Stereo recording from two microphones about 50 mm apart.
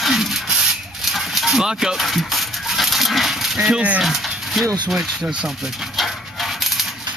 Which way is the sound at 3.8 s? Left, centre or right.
Right.